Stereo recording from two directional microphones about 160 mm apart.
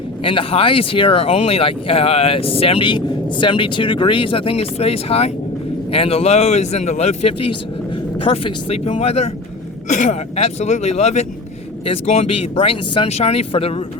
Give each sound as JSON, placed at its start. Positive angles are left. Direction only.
{"t": 0.3, "sound": "speech", "side_deg": 35}